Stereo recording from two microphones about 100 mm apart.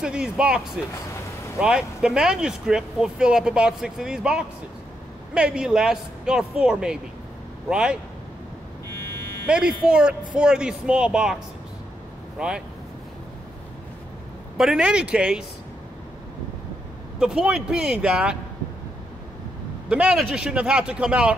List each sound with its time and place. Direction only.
0.0 s speech: 10° right (ahead or behind)
1.6 s speech: 5° right (ahead or behind)
8.8 s buzzer: 25° left (ahead or behind)
9.5 s speech: 10° right (ahead or behind)
14.6 s speech: 10° right (ahead or behind)
17.2 s speech: 5° right (ahead or behind)
19.9 s speech: 10° right (ahead or behind)